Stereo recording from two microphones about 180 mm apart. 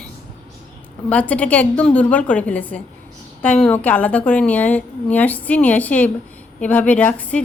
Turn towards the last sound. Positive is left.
turn(degrees=10)  # may be behind; listen again after turning